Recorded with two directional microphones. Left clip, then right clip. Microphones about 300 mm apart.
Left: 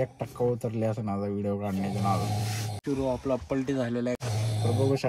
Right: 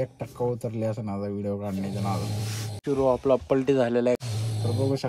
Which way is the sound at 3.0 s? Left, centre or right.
Right.